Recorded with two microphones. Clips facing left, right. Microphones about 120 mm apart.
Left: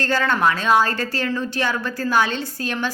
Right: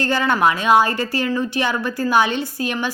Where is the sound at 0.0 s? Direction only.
15° right (ahead or behind).